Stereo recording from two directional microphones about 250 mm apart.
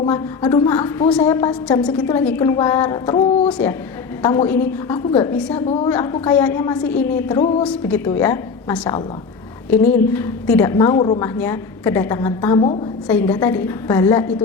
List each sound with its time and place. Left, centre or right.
0.1 s a woman's voice: centre
5.6 s a woman's voice: left
6.2 s a woman's voice: centre